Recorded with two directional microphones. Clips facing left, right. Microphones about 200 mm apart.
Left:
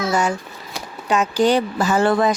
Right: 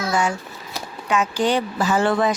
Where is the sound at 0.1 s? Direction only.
40° left (ahead or behind).